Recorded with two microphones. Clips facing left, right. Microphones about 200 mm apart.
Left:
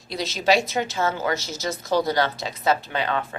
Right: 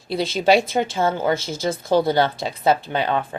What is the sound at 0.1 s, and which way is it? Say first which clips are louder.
Speech: right 6 dB; 55° right (ahead or behind).